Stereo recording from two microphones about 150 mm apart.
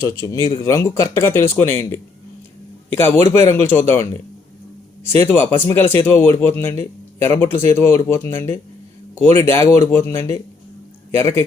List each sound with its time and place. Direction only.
0.0 s speech: 20° left (ahead or behind)
3.0 s speech: 15° left (ahead or behind)